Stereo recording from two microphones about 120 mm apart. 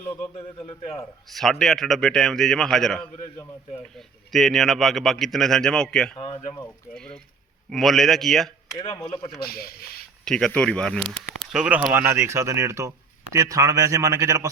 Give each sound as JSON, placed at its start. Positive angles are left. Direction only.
{"t": 0.7, "sound": "speech", "side_deg": 55}
{"t": 1.3, "sound": "a man's voice", "side_deg": 0}
{"t": 6.1, "sound": "speech", "side_deg": 50}
{"t": 6.9, "sound": "a man's voice", "side_deg": 5}
{"t": 8.8, "sound": "speech", "side_deg": 40}
{"t": 10.2, "sound": "a man's voice", "side_deg": 5}
{"t": 11.5, "sound": "speech", "side_deg": -10}